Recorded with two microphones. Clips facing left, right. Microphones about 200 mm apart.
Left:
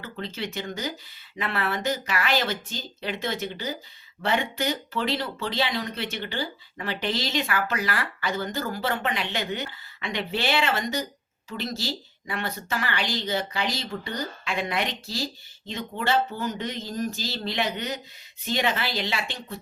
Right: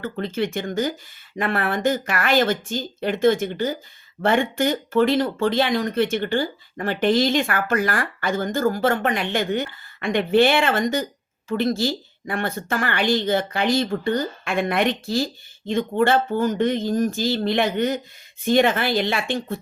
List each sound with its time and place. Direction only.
0.0 s speech: 50° right (ahead or behind)